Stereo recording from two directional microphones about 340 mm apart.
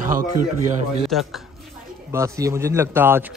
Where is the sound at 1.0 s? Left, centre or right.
Centre.